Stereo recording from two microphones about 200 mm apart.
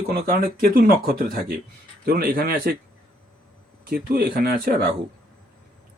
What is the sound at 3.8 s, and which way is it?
Speech, 50° right (ahead or behind).